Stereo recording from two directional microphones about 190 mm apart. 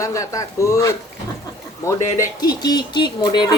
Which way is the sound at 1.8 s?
20° left (ahead or behind).